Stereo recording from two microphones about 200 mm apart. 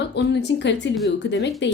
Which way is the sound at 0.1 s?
60° left (ahead or behind).